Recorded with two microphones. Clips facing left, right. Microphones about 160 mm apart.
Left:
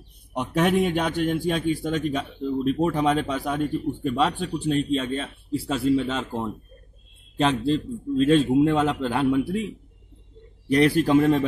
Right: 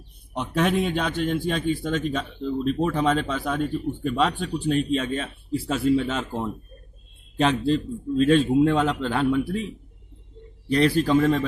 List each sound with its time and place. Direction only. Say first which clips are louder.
0.3 s a man's voice: left 1 dB; 10° left (ahead or behind)
11.1 s speech: left 2 dB; 15° left (ahead or behind)